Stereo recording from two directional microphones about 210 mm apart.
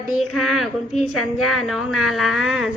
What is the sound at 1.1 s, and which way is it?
Speech, 90° left.